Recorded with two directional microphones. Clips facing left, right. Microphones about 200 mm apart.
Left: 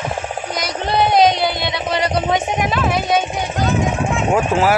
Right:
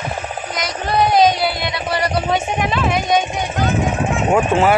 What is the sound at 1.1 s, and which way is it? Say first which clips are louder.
Music: left 1 dB; 20° left (ahead or behind).